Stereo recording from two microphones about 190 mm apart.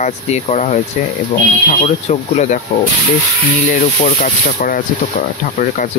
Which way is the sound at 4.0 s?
45° left (ahead or behind).